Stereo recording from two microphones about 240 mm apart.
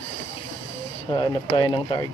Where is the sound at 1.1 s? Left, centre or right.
Centre.